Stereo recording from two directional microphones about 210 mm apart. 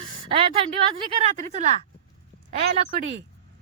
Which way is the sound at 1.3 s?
35° right (ahead or behind).